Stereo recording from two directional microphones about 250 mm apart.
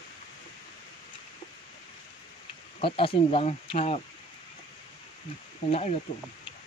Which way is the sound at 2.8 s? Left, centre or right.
Left.